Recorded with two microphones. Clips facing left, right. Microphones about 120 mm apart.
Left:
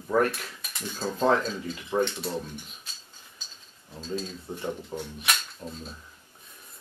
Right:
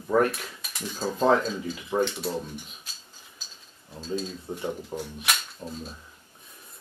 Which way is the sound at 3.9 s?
Centre (ahead or behind).